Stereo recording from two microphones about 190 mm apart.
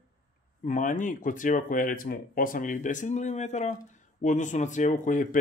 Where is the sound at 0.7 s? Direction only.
45° left (ahead or behind).